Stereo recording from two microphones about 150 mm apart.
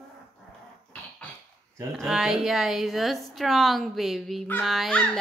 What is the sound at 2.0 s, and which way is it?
A woman's voice, 5° right (ahead or behind).